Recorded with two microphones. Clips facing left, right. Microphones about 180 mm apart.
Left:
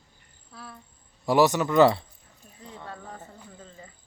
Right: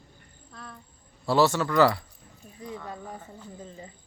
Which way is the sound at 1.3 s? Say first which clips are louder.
Left 2 dB; 15° left (ahead or behind).